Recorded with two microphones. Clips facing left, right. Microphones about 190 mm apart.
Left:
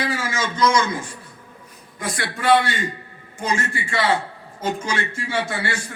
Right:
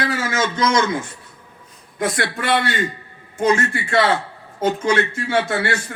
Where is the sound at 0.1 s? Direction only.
60° right (ahead or behind).